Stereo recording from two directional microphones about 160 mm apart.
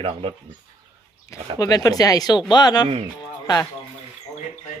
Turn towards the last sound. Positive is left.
turn(degrees=25)  # may be behind; listen again after turning